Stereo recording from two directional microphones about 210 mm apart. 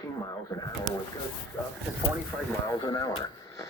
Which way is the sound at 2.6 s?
20° left (ahead or behind).